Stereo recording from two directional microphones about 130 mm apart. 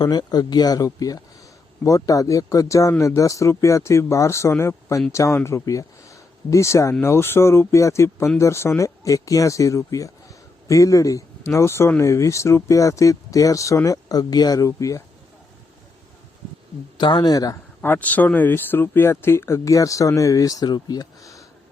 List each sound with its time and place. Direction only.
0.0 s speech: 30° left (ahead or behind)
17.0 s speech: 35° left (ahead or behind)
17.8 s speech: 15° left (ahead or behind)